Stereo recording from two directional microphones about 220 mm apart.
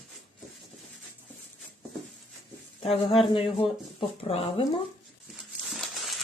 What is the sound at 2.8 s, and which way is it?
Speech, 25° left (ahead or behind).